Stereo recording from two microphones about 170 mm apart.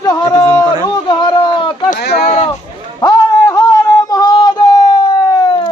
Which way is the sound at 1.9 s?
75° left (ahead or behind).